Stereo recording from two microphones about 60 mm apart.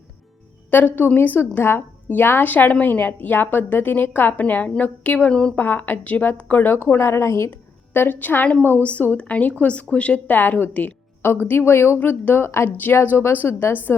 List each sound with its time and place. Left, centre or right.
0.7 s a woman's voice: left; by 5.5 s centre
5.5 s a woman's voice: left
7.0 s a woman's voice: left
8.8 s a woman's voice: left
11.2 s a woman's voice: left
11.9 s a woman's voice: left